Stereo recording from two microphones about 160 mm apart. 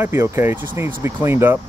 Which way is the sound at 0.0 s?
15° right (ahead or behind).